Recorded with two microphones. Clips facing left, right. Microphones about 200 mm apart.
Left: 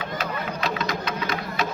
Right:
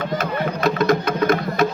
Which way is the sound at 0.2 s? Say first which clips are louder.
Right 7 dB; 50° right (ahead or behind).